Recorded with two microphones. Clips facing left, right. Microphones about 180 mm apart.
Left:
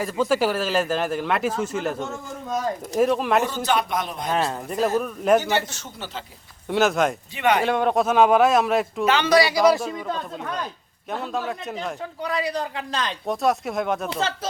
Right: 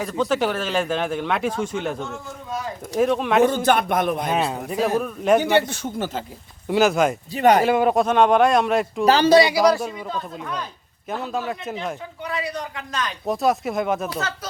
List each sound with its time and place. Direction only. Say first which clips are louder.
0.0 s speech: even; 5° left (ahead or behind)
3.4 s a man's voice: right 5 dB; 50° right (ahead or behind)
4.3 s speech: right 1 dB; 5° right (ahead or behind)
5.4 s a man's voice: right 6 dB; 60° right (ahead or behind)
6.7 s speech: right 2 dB; centre (ahead or behind)
7.3 s speech: right 5 dB; 40° right (ahead or behind)
7.6 s speech: right 3 dB; 5° right (ahead or behind)
8.0 s speech: even; 5° left (ahead or behind)
9.0 s speech: right 5 dB; 35° right (ahead or behind)
11.1 s speech: right 1 dB; centre (ahead or behind)
12.2 s a man's voice: left 3 dB; 35° left (ahead or behind)
13.2 s speech: right 2 dB; centre (ahead or behind)
14.1 s speech: left 2 dB; 30° left (ahead or behind)